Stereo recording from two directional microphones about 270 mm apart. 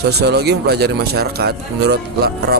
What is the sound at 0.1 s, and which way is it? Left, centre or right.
A man's voice, right.